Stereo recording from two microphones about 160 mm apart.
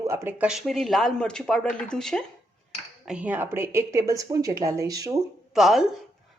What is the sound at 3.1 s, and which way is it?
Speech, 10° right (ahead or behind).